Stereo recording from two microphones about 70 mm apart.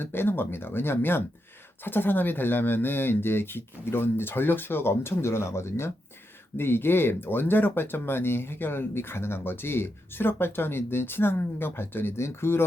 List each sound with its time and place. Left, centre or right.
0.0 s speech: left